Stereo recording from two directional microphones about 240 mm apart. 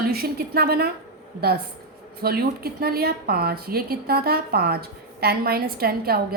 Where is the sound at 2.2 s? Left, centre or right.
Right.